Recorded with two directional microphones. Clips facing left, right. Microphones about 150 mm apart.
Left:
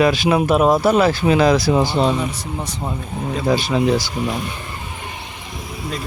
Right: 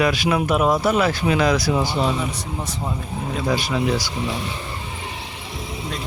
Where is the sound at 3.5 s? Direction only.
30° left (ahead or behind).